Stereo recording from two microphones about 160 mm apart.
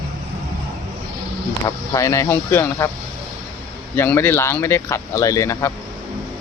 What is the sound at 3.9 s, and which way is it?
Speech, 15° left (ahead or behind).